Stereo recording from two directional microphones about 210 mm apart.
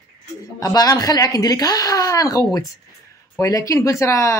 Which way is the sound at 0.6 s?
15° left (ahead or behind).